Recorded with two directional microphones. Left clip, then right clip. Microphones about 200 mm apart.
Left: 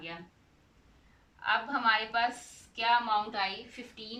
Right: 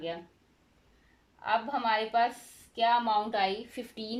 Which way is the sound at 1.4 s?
25° right (ahead or behind).